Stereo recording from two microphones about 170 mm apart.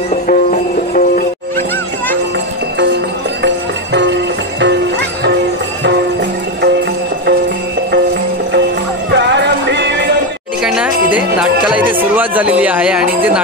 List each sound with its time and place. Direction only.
0.3 s music: 50° left (ahead or behind)
3.4 s music: 90° right
9.1 s music: 90° right
10.6 s music: 5° right (ahead or behind)